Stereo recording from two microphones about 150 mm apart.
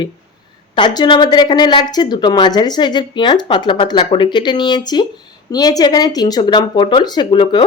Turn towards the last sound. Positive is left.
turn(degrees=30)  # may be behind; listen again after turning